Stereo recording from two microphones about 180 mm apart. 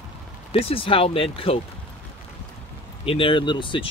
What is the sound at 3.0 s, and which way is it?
Speech, 30° left (ahead or behind).